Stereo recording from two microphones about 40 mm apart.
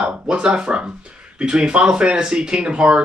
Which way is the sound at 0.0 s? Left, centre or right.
Right.